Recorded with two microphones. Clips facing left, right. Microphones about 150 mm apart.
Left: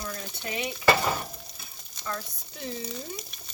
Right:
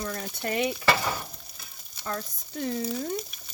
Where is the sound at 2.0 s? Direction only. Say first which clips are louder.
Right 2 dB; 40° right (ahead or behind).